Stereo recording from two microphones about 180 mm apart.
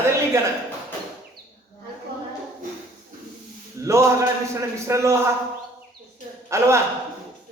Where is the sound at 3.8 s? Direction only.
15° right (ahead or behind).